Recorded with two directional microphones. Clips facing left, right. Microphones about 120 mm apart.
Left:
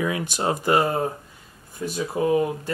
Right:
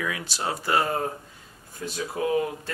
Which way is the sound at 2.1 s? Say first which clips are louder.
Left 4 dB; 25° left (ahead or behind).